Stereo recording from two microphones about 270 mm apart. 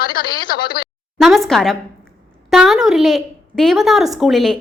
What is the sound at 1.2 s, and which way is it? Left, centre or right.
A woman's voice, centre.